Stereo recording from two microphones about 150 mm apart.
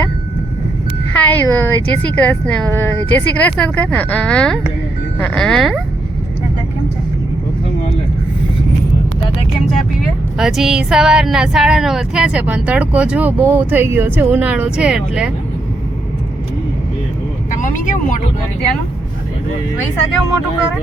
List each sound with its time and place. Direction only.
1.2 s speech: 10° left (ahead or behind)
10.3 s speech: centre (ahead or behind)
17.5 s speech: 60° left (ahead or behind)